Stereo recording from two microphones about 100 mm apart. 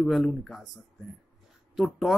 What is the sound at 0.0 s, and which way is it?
Speech, centre (ahead or behind).